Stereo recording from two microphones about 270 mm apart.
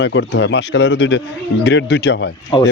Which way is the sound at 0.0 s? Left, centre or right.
Left.